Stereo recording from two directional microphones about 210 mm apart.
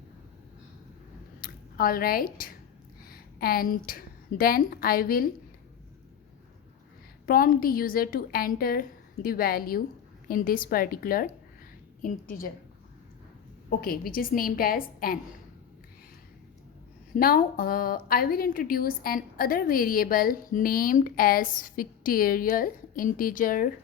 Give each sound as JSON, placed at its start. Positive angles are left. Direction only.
{"t": 1.4, "sound": "a woman's voice", "side_deg": 45}
{"t": 7.3, "sound": "a woman's voice", "side_deg": 40}
{"t": 13.7, "sound": "a woman's voice", "side_deg": 45}
{"t": 17.2, "sound": "a woman's voice", "side_deg": 45}